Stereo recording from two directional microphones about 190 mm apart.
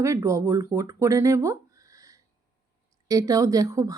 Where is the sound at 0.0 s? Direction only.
15° right (ahead or behind).